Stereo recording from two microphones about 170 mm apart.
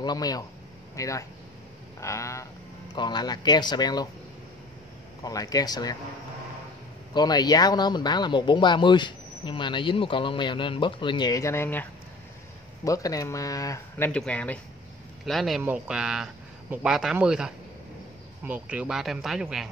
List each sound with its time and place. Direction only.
0.0 s speech: 25° left (ahead or behind)
2.0 s a sound: 15° left (ahead or behind)
3.0 s speech: 25° left (ahead or behind)
5.2 s speech: 20° left (ahead or behind)
7.2 s speech: 25° left (ahead or behind); by 19.4 s centre (ahead or behind)